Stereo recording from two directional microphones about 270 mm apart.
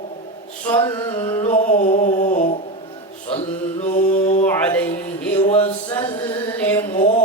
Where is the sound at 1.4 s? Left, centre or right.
Left.